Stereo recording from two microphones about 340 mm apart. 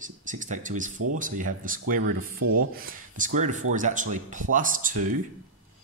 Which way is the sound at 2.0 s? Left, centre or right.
Right.